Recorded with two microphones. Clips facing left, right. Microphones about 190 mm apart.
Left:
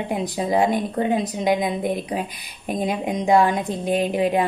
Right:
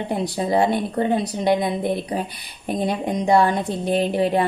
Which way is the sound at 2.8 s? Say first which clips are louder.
Even; 15° left (ahead or behind).